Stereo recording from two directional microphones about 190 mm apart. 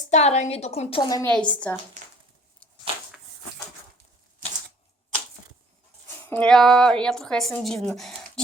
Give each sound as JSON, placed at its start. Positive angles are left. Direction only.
{"t": 0.1, "sound": "a woman's voice", "side_deg": 35}
{"t": 1.2, "sound": "a woman's voice", "side_deg": 5}
{"t": 6.2, "sound": "a woman's voice", "side_deg": 5}